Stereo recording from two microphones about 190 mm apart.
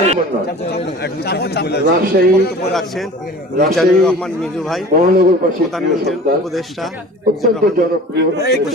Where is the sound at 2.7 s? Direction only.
Centre (ahead or behind).